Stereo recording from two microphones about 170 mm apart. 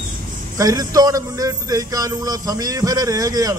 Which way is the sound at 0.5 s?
20° right (ahead or behind).